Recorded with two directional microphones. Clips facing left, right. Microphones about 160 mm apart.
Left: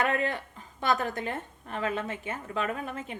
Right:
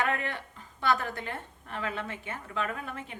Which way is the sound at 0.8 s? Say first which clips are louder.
Left 1 dB; 20° left (ahead or behind).